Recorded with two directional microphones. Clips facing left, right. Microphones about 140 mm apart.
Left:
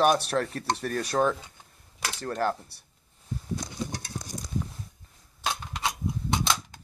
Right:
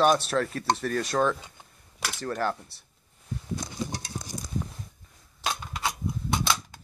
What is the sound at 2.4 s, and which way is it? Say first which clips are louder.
Speech: left 3 dB; 15° left (ahead or behind).